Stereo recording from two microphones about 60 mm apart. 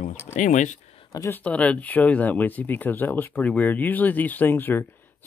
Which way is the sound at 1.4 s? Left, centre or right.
Left.